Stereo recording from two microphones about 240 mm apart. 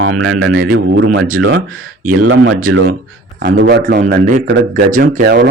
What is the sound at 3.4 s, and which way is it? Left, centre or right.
Speech, right.